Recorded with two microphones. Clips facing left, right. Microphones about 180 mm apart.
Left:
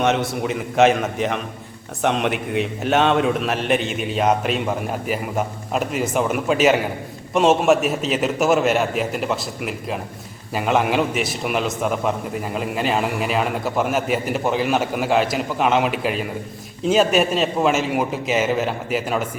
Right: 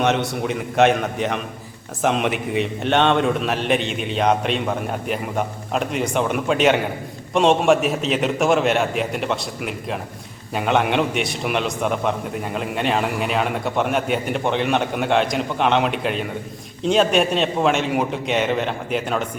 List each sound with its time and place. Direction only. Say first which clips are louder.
0.0 s a man's voice: even; centre (ahead or behind)